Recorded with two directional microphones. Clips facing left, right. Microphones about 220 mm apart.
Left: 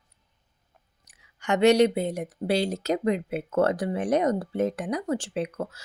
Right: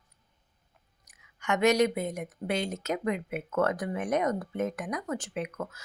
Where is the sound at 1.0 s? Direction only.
30° left (ahead or behind).